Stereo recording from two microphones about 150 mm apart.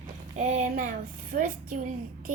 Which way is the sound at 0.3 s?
60° right (ahead or behind).